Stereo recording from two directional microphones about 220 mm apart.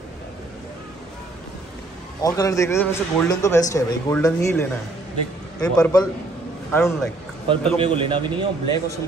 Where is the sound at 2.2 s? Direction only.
15° left (ahead or behind).